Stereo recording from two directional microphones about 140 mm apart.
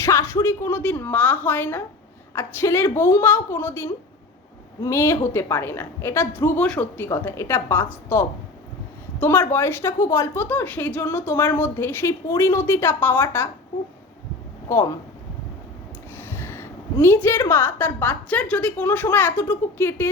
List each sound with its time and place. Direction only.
0.0 s a woman's voice: 20° left (ahead or behind)
16.1 s a woman's voice: 15° left (ahead or behind)